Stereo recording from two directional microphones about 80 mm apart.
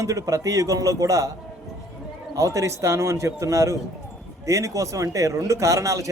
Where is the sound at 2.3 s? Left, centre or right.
Right.